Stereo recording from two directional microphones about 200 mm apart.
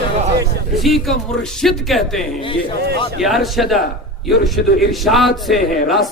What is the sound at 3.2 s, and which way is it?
Speech, centre (ahead or behind).